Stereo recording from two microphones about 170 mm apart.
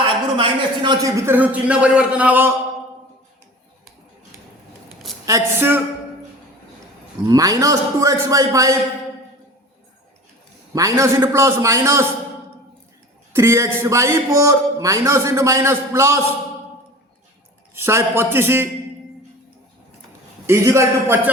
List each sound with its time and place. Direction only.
0.0 s a man's voice: 30° right (ahead or behind); by 2.5 s 10° right (ahead or behind)
5.2 s a man's voice: 15° right (ahead or behind)
7.3 s a man's voice: 20° right (ahead or behind)
10.8 s a man's voice: 20° right (ahead or behind)
13.3 s a man's voice: 15° right (ahead or behind)
17.7 s a man's voice: 15° right (ahead or behind)
20.5 s a man's voice: 15° right (ahead or behind)